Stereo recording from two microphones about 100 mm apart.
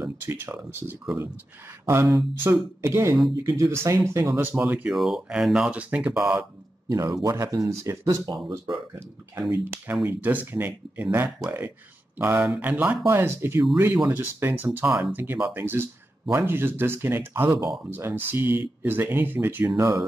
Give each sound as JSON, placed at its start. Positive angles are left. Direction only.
{"t": 0.0, "sound": "speech", "side_deg": -25}
{"t": 4.9, "sound": "speech", "side_deg": 0}
{"t": 6.9, "sound": "speech", "side_deg": -35}
{"t": 10.0, "sound": "speech", "side_deg": -20}
{"t": 19.8, "sound": "speech", "side_deg": -35}